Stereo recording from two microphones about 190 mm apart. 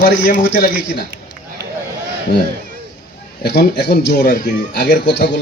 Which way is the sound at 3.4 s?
60° left (ahead or behind).